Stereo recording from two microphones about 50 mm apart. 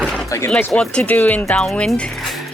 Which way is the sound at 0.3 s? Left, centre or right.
Left.